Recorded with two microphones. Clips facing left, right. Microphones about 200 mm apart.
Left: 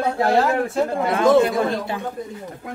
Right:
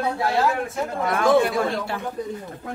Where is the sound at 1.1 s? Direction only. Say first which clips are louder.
Left 2 dB; 20° left (ahead or behind).